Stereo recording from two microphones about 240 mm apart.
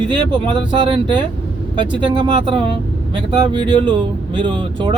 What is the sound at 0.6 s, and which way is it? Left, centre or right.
Speech, right.